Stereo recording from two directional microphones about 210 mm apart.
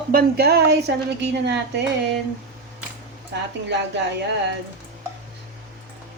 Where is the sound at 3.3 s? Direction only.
55° right (ahead or behind).